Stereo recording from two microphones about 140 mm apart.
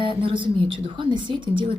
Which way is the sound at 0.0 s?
40° right (ahead or behind).